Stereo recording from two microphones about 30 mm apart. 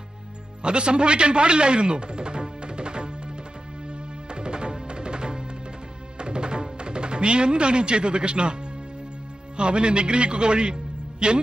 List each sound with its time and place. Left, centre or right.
0.6 s speech: right
3.8 s music: right
9.6 s a man's voice: right